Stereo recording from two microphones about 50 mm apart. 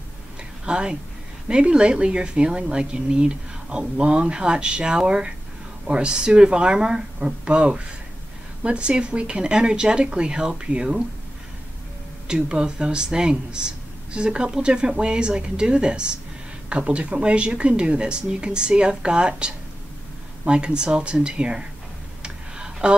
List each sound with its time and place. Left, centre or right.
0.7 s speech: centre
12.3 s speech: centre
22.2 s tick-tock: centre